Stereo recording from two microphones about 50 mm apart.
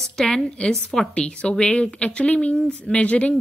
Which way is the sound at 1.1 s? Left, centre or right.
Left.